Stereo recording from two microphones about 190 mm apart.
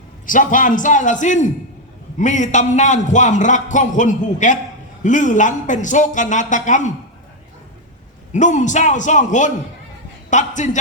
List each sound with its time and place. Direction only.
0.3 s a man's voice: 45° left (ahead or behind)
8.3 s a man's voice: 40° left (ahead or behind)